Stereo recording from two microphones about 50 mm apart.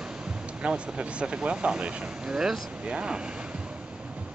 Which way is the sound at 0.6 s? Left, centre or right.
Right.